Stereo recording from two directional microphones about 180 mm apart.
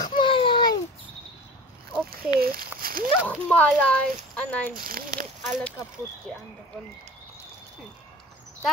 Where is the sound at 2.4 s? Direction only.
55° right (ahead or behind).